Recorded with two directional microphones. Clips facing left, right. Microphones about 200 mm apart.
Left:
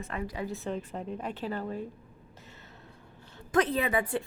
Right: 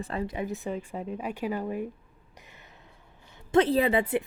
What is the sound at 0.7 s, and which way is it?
A woman's voice, 5° right (ahead or behind).